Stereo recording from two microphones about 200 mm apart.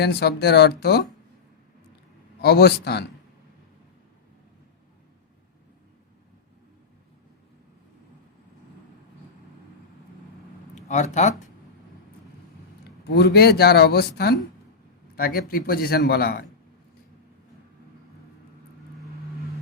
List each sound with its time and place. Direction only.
0.0 s speech: 55° left (ahead or behind)
2.4 s a man's voice: 55° left (ahead or behind)
10.8 s speech: 35° left (ahead or behind)
13.1 s a man's voice: 55° left (ahead or behind)